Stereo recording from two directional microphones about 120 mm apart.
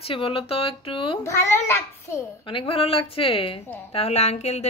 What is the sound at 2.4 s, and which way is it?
A woman's voice, 50° left (ahead or behind).